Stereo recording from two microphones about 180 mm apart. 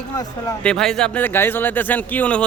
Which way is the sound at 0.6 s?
5° left (ahead or behind).